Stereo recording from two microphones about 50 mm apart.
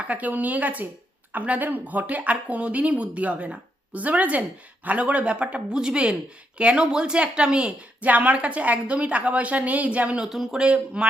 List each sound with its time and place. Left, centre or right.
0.1 s speech: right
8.0 s speech: right
10.2 s speech: centre
11.0 s speech: right